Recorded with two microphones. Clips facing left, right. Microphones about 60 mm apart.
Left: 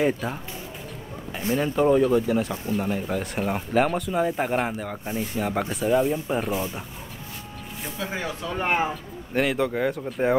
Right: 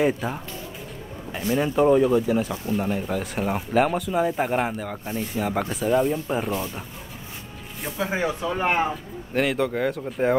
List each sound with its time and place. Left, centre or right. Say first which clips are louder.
0.0 s speech: right 1 dB; centre
1.6 s speech: right 2 dB; centre
8.0 s speech: right 6 dB; centre
8.6 s speech: even; centre